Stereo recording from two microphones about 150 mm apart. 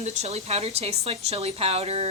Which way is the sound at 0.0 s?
50° right (ahead or behind).